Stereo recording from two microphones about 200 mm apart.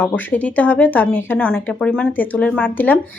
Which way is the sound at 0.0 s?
10° left (ahead or behind).